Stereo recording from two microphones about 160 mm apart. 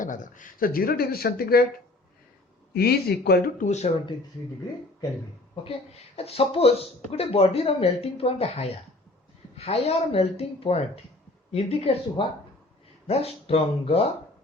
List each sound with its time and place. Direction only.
0.0 s speech: 55° left (ahead or behind); by 1.6 s 70° left (ahead or behind)
2.7 s speech: 80° left
3.6 s speech: 45° left (ahead or behind)
6.1 s speech: 40° left (ahead or behind)